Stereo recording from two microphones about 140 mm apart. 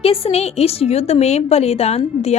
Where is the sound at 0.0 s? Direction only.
45° left (ahead or behind).